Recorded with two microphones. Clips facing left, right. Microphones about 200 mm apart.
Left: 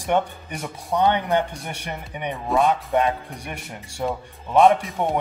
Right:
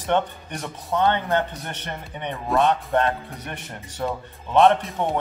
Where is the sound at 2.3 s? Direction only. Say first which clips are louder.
Even; centre (ahead or behind).